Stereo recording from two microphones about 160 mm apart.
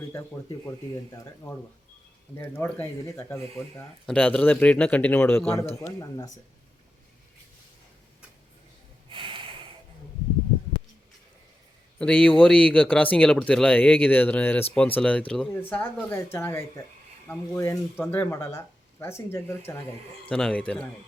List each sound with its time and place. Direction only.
0.1 s speech: 15° left (ahead or behind)
9.0 s snort: 30° right (ahead or behind)
11.9 s speech: 5° left (ahead or behind)